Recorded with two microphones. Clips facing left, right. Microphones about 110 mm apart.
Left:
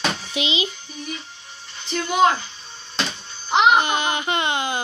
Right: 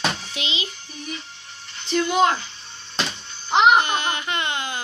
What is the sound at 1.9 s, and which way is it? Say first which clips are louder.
Speech: left 1 dB; 5° left (ahead or behind).